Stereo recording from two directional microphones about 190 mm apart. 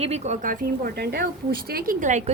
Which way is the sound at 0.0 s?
35° right (ahead or behind).